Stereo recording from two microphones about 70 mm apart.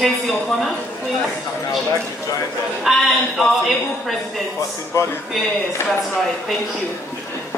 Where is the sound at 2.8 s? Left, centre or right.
Centre.